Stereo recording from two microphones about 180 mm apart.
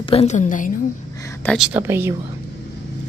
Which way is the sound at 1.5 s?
5° right (ahead or behind).